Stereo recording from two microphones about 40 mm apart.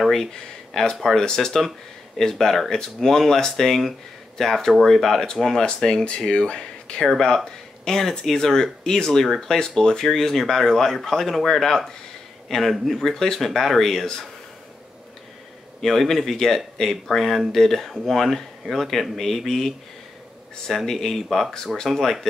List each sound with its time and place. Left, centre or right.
0.0 s a sound: centre
0.3 s speech: centre
6.0 s speech: left
7.8 s speech: centre
12.9 s speech: centre
15.8 s speech: centre